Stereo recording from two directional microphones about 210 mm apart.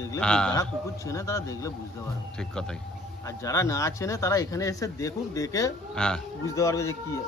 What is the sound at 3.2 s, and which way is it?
Speech, 15° left (ahead or behind).